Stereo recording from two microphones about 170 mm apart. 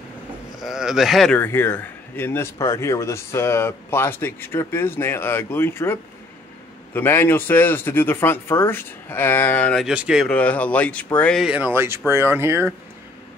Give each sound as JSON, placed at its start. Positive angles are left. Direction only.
{"t": 0.6, "sound": "speech", "side_deg": -5}
{"t": 9.8, "sound": "speech", "side_deg": -5}
{"t": 10.3, "sound": "speech", "side_deg": 10}